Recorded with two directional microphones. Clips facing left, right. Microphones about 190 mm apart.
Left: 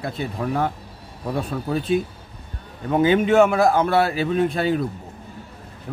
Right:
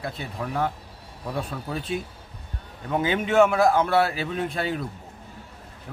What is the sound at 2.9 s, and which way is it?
Speech, 40° left (ahead or behind).